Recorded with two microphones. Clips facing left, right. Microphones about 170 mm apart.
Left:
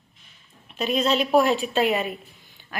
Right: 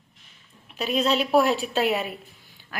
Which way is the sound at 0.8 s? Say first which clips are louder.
Left 1 dB; 5° right (ahead or behind).